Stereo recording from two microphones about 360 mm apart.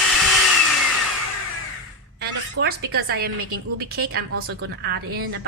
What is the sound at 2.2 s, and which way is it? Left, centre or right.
A woman's voice, right.